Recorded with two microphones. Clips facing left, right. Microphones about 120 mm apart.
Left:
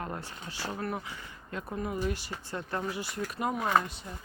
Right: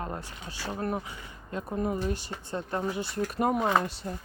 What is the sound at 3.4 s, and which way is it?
Speech, 45° right (ahead or behind).